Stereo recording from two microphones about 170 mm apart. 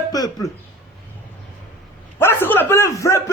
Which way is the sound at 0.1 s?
20° left (ahead or behind).